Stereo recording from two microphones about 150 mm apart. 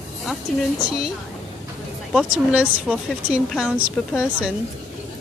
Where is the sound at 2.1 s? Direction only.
5° right (ahead or behind).